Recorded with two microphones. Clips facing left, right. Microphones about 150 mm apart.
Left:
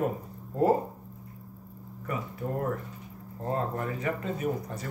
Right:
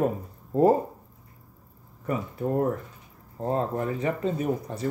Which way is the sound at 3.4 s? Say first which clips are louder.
Right 4 dB; 25° right (ahead or behind).